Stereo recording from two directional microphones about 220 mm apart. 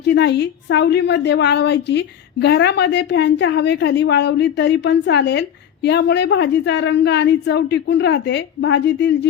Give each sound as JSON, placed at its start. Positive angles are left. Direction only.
{"t": 0.0, "sound": "a woman's voice", "side_deg": 50}